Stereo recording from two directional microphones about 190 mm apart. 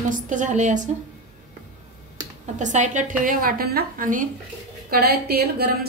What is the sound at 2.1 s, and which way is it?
A woman's voice, 40° right (ahead or behind).